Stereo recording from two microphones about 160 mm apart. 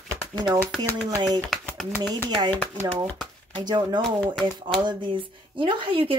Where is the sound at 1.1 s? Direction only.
25° right (ahead or behind).